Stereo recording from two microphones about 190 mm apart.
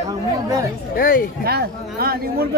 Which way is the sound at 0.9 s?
50° left (ahead or behind).